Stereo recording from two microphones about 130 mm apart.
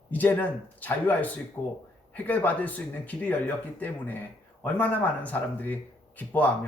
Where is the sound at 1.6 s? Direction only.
20° left (ahead or behind).